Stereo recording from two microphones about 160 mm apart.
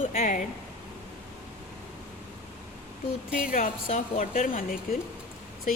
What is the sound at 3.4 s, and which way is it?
A woman's voice, 60° left (ahead or behind).